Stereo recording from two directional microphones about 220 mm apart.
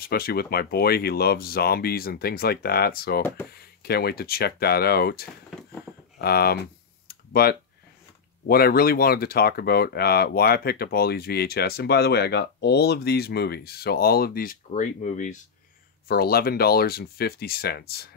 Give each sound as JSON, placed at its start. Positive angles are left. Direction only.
{"t": 0.0, "sound": "speech", "side_deg": 45}
{"t": 6.1, "sound": "computer keyboard", "side_deg": 45}
{"t": 8.5, "sound": "speech", "side_deg": 45}